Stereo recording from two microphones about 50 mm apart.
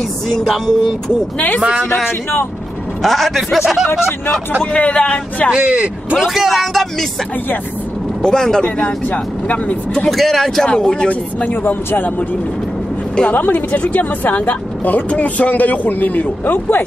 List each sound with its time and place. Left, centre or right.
0.7 s speech: centre
3.0 s speech: centre
4.7 s speech: left
5.5 s speech: right
6.1 s speech: centre
8.2 s a man's voice: centre
8.7 s speech: left
10.0 s speech: centre
10.7 s speech: centre
11.6 s speech: left
13.3 s speech: left